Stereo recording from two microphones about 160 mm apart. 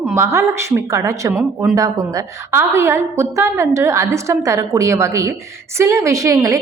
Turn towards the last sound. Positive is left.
turn(degrees=-20)  # may be behind; listen again after turning